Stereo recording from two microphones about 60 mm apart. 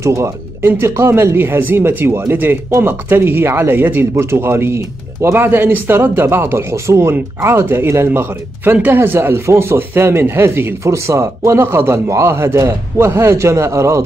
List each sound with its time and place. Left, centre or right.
0.0 s speech: right
4.1 s speech: right
10.8 s speech: right